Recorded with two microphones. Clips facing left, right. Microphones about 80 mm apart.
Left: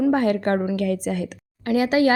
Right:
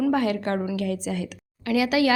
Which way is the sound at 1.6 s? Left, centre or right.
Left.